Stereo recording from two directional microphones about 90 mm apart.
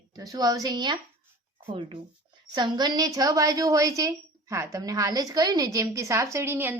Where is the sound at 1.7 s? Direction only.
85° right.